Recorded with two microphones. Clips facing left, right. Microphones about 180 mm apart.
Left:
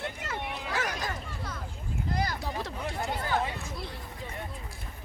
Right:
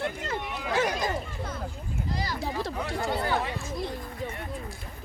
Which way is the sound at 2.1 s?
55° left (ahead or behind).